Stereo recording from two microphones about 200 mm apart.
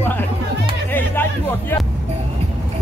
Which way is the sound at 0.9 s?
10° left (ahead or behind).